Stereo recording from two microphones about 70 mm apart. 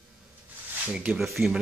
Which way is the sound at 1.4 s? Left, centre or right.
Right.